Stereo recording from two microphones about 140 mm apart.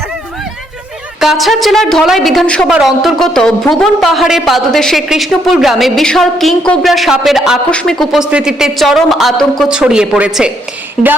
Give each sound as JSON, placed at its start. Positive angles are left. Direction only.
{"t": 1.2, "sound": "speech", "side_deg": 0}